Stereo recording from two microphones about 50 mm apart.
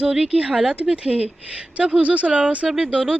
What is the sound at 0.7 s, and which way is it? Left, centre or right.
A woman's voice, right.